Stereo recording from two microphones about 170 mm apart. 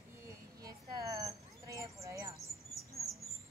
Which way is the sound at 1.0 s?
20° right (ahead or behind).